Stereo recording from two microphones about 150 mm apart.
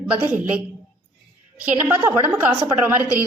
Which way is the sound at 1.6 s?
10° right (ahead or behind).